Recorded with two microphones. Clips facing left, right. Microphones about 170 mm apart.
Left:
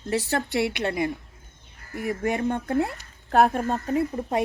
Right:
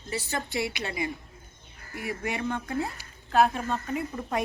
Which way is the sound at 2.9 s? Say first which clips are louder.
Left 5 dB; 60° left (ahead or behind).